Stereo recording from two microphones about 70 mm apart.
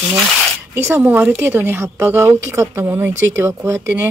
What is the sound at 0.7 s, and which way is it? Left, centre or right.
A woman's voice, right.